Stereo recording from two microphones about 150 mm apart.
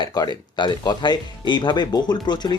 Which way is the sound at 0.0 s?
30° left (ahead or behind).